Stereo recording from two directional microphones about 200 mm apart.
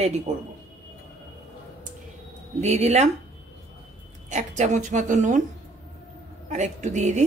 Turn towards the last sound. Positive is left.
turn(degrees=-35)  # may be behind; listen again after turning